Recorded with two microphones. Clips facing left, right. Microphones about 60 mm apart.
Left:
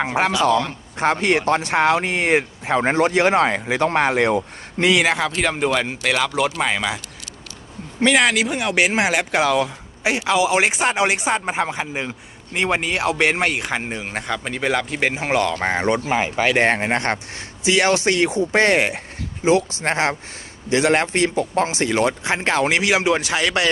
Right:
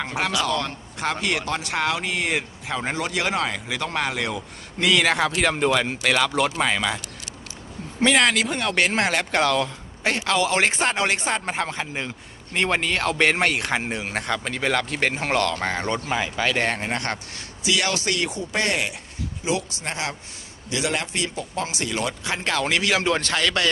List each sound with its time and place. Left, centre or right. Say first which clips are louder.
0.0 s speech: left 6 dB; left
4.9 s speech: left 2 dB; centre
8.0 s speech: left 2 dB; centre
15.5 s speech: left 5 dB; left